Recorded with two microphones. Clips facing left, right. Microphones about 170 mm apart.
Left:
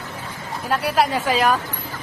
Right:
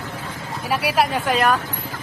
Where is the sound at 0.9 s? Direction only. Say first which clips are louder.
Left 1 dB; centre (ahead or behind).